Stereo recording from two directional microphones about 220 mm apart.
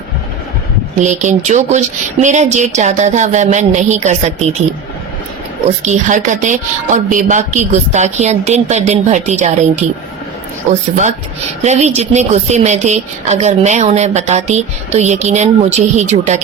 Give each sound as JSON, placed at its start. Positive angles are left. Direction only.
{"t": 0.9, "sound": "a woman's voice", "side_deg": -35}
{"t": 5.6, "sound": "a woman's voice", "side_deg": -30}